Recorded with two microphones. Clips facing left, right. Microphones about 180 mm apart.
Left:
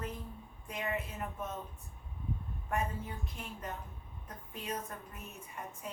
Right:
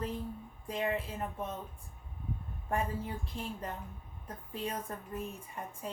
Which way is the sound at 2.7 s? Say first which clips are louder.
Right 2 dB; 30° right (ahead or behind).